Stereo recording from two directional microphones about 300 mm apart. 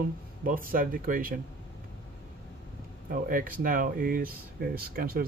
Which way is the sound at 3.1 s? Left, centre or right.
Right.